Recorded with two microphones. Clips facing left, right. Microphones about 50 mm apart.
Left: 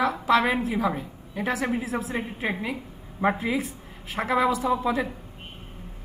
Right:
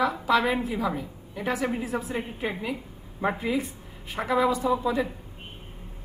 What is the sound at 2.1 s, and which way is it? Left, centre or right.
Speech, left.